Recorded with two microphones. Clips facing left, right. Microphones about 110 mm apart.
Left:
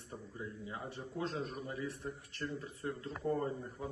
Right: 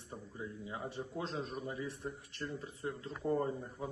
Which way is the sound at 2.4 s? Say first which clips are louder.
Even; 10° right (ahead or behind).